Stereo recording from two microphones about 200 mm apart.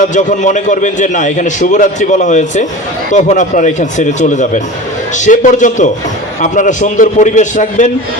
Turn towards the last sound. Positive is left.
turn(degrees=40)  # may be behind; listen again after turning